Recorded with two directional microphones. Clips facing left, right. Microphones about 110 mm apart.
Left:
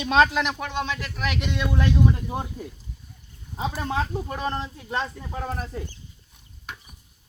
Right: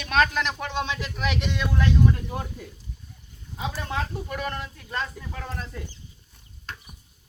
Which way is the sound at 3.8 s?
30° left (ahead or behind).